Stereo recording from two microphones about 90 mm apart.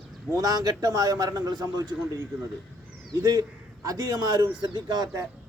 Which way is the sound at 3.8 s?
40° right (ahead or behind).